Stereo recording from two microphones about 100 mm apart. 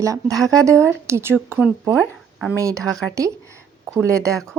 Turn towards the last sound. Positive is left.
turn(degrees=-30)  # may be behind; listen again after turning